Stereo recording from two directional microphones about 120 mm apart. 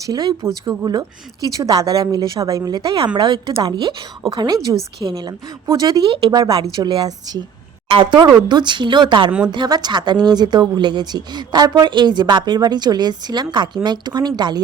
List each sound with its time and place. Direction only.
0.0 s speech: 35° right (ahead or behind)
6.1 s speech: 50° right (ahead or behind)
6.3 s speech: 35° right (ahead or behind)